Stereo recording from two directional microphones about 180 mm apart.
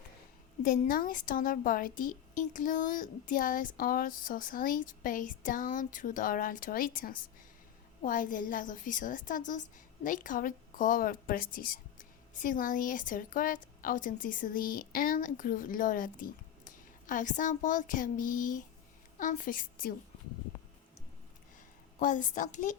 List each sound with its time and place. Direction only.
0.6 s a woman's voice: 50° left (ahead or behind)
21.9 s a woman's voice: 45° left (ahead or behind)